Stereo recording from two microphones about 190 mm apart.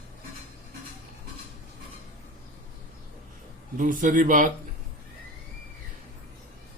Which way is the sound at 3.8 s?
45° right (ahead or behind).